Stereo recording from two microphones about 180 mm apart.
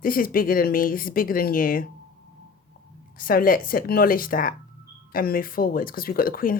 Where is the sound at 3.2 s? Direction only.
50° left (ahead or behind).